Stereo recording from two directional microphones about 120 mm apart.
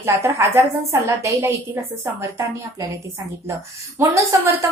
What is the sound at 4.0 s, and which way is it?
Speech, 25° right (ahead or behind).